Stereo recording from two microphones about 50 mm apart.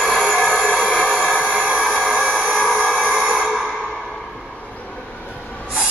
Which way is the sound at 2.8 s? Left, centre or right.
Right.